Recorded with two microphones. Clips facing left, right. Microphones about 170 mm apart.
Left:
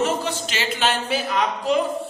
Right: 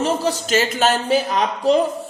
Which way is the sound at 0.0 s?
40° right (ahead or behind).